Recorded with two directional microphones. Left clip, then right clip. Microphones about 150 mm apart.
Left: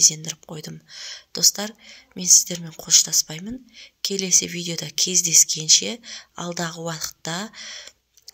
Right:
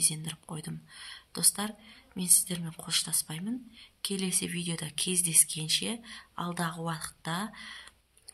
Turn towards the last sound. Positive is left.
turn(degrees=35)  # may be behind; listen again after turning